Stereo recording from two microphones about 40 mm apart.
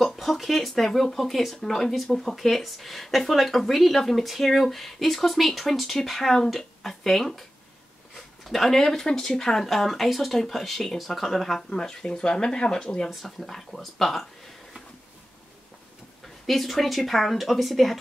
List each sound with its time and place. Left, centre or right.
0.0 s speech: centre
8.5 s speech: centre
13.1 s speech: centre
16.4 s speech: centre